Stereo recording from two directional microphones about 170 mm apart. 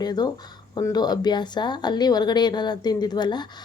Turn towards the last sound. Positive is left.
turn(degrees=25)  # may be behind; listen again after turning